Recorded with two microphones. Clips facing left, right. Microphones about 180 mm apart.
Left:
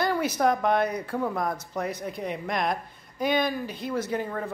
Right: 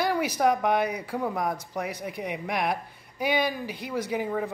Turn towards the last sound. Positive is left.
turn(degrees=-15)  # may be behind; listen again after turning